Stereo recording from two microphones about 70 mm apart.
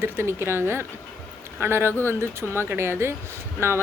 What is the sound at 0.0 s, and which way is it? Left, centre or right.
Speech, right.